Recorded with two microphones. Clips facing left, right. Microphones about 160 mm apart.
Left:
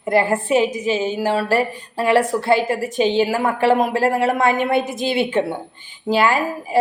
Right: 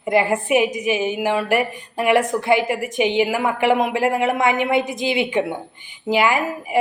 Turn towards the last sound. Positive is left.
turn(degrees=-15)  # may be behind; listen again after turning